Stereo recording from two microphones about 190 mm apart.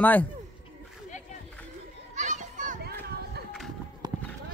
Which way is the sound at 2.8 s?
60° right (ahead or behind).